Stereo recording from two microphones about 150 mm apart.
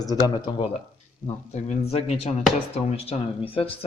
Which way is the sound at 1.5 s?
45° left (ahead or behind).